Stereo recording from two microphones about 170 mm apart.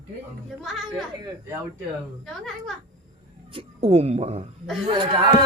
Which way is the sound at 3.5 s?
35° right (ahead or behind).